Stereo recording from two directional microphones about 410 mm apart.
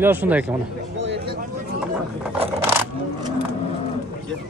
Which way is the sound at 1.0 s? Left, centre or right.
Right.